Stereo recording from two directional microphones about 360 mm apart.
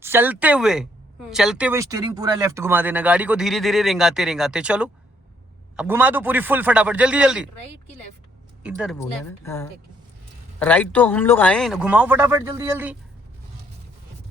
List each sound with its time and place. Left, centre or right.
0.0 s speech: centre
8.6 s speech: centre